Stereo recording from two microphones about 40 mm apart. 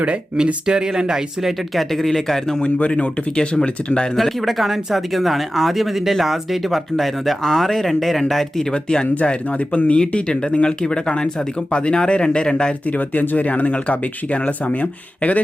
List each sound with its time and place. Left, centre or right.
0.6 s speech: centre
2.6 s speech: left
4.2 s speech: centre
8.7 s speech: left
9.1 s speech: left
12.8 s speech: left